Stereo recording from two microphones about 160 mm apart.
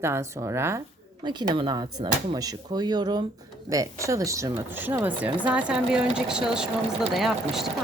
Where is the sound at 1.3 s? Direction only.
30° right (ahead or behind); by 6.6 s 5° right (ahead or behind).